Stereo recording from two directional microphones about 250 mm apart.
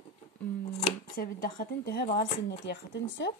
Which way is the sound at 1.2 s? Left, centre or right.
Left.